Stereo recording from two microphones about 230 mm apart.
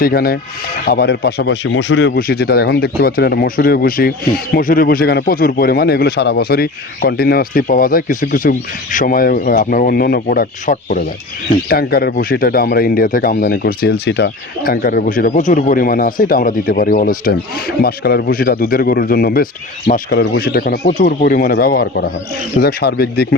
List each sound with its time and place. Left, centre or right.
0.0 s speech: left